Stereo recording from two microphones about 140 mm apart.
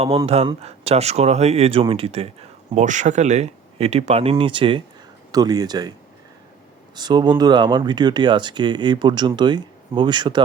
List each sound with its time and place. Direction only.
0.4 s speech: 45° right (ahead or behind); by 5.9 s 30° right (ahead or behind)
6.9 s speech: 30° right (ahead or behind)